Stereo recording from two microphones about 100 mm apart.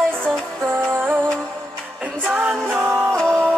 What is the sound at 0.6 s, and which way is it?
Music, 20° right (ahead or behind).